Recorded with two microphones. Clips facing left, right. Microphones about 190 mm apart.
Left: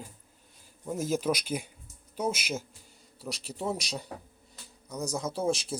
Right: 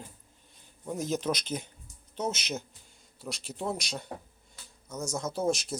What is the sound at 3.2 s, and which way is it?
Speech, 35° left (ahead or behind).